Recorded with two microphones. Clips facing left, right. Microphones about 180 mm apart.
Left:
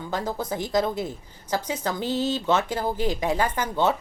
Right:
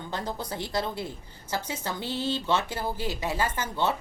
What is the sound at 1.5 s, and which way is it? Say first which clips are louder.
A woman's voice: left 5 dB; 15° left (ahead or behind).